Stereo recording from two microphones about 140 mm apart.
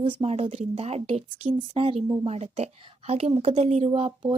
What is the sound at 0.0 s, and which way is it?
A woman's voice, 40° right (ahead or behind).